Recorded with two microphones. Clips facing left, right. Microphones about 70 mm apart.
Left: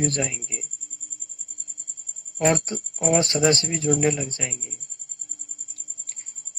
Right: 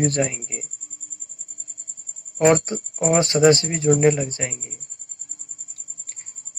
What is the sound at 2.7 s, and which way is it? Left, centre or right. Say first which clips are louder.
Speech: right 2 dB; right.